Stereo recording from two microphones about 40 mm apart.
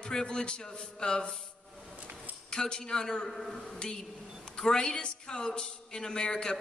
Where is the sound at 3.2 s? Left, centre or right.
Centre.